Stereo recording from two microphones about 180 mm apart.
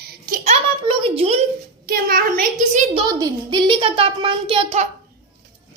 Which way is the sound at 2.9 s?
25° right (ahead or behind).